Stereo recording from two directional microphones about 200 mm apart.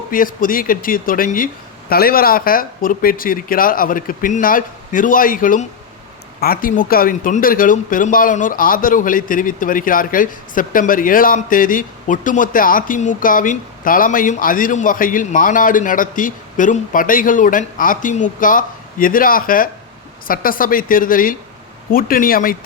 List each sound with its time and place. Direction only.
0.1 s speech: 45° left (ahead or behind)